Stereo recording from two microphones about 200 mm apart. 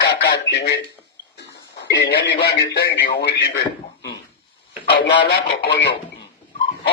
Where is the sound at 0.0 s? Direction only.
60° left (ahead or behind).